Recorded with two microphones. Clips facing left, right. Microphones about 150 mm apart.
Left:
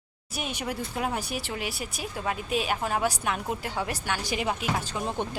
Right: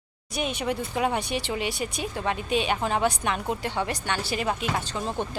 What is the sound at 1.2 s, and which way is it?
Speech, 75° right (ahead or behind).